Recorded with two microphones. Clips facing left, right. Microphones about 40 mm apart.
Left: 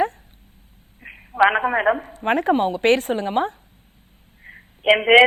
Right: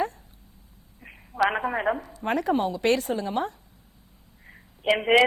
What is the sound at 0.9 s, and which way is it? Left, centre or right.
A woman's voice, left.